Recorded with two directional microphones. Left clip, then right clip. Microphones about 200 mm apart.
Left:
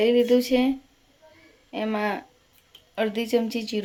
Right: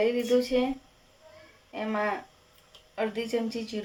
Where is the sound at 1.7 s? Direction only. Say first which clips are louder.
Left 3 dB; 50° left (ahead or behind).